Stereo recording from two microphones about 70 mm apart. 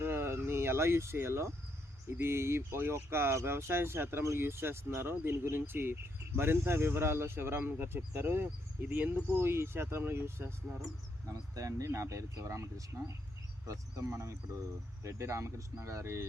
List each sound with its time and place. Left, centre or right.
0.0 s a sound: right
2.0 s speech: right
11.3 s speech: right